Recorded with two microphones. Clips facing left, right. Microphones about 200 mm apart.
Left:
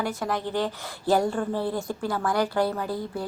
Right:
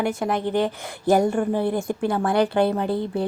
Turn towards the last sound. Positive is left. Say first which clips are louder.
# right 6 dB
turn(degrees=-25)  # may be behind; listen again after turning